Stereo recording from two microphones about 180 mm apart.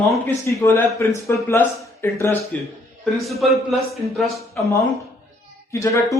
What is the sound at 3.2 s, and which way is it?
A man's voice, centre (ahead or behind).